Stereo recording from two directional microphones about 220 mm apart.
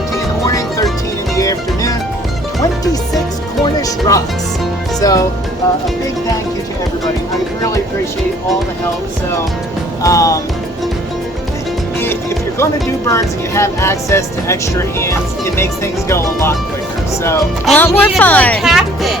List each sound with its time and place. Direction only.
1.4 s music: 15° left (ahead or behind)
3.6 s music: 15° left (ahead or behind)
4.9 s speech: 15° left (ahead or behind)
10.0 s speech: 15° left (ahead or behind)
13.1 s speech: 15° left (ahead or behind)
17.7 s speech: 5° left (ahead or behind)